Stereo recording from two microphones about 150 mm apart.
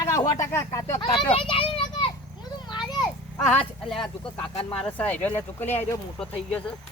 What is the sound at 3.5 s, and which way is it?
Speech, 5° left (ahead or behind).